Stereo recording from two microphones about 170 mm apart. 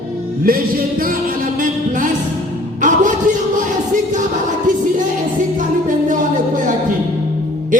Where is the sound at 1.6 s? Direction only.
50° right (ahead or behind).